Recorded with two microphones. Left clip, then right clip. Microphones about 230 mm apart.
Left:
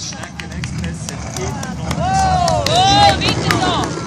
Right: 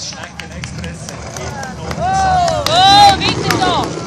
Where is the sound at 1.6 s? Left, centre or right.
Left.